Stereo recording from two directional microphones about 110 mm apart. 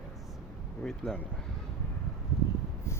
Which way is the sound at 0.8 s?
5° left (ahead or behind).